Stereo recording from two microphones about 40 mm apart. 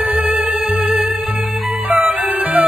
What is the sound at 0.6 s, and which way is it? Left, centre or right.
Music, centre.